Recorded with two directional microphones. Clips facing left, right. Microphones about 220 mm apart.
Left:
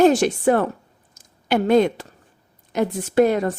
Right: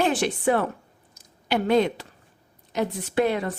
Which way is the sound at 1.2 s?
45° left (ahead or behind).